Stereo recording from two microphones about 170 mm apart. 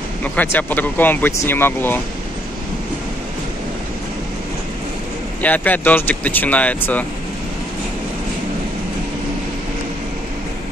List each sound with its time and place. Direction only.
0.2 s speech: 10° left (ahead or behind)
5.4 s speech: 10° left (ahead or behind)